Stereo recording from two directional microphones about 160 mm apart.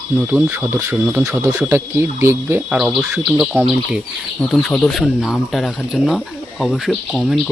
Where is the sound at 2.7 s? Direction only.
5° right (ahead or behind).